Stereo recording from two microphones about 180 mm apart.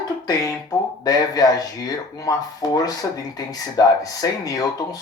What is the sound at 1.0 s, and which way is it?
Speech, 20° left (ahead or behind).